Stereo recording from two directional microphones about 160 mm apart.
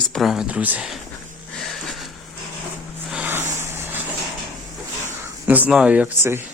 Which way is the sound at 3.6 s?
15° right (ahead or behind).